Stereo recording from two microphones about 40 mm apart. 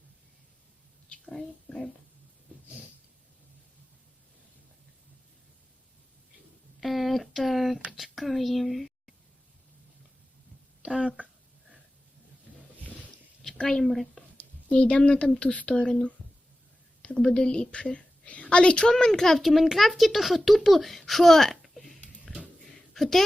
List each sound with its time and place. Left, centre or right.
1.3 s whispering: centre
6.7 s a sound: centre
13.6 s a woman's voice: left
13.8 s speech: centre
14.7 s a woman's voice: left
17.0 s a sound: left
18.5 s a woman's voice: left
19.4 s a child's voice: centre
22.3 s a sound: centre